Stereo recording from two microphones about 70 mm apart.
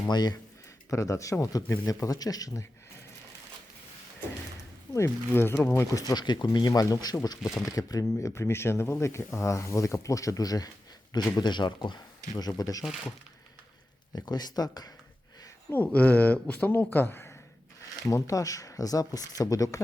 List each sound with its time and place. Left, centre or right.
0.1 s speech: left
0.9 s speech: left
1.6 s speech: left
1.9 s speech: left
4.9 s speech: left
5.9 s speech: left
6.1 s speech: left
7.4 s speech: left
11.3 s speech: left
12.4 s speech: left
14.1 s speech: left
15.7 s speech: left
18.0 s speech: left